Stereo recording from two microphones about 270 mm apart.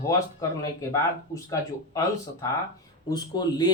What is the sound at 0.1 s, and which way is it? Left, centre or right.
Speech, centre.